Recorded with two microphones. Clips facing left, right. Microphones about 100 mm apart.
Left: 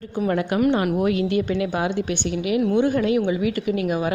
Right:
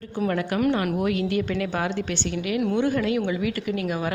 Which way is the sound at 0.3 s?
20° left (ahead or behind).